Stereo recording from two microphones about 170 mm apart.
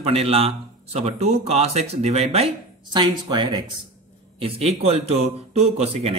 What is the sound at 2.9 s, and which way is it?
Speech, 25° right (ahead or behind).